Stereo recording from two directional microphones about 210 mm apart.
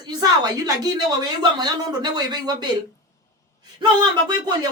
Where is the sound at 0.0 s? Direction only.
20° right (ahead or behind).